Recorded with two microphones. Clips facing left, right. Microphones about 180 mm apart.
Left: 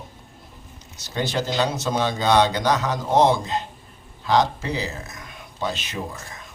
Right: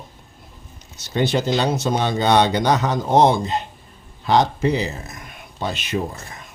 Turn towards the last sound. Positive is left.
turn(degrees=-60)  # may be behind; listen again after turning